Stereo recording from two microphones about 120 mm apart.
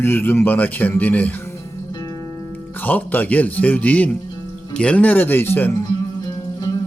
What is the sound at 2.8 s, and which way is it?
Speech, 15° left (ahead or behind).